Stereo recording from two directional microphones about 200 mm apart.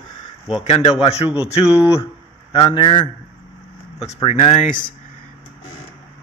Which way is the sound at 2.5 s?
25° left (ahead or behind).